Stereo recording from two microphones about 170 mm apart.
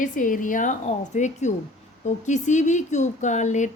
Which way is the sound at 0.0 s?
50° left (ahead or behind).